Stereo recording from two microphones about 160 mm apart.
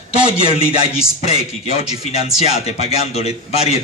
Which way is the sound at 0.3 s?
35° left (ahead or behind).